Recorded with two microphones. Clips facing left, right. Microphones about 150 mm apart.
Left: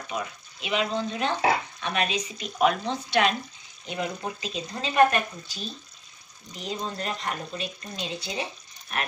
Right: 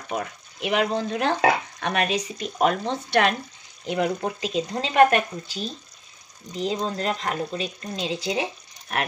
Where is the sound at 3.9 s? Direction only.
85° right.